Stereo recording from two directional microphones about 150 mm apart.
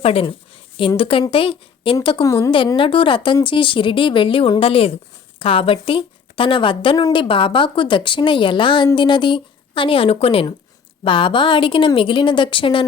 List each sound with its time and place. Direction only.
0.0 s a woman's voice: 40° left (ahead or behind)
2.2 s a woman's voice: 20° left (ahead or behind)
2.5 s speech: 35° left (ahead or behind)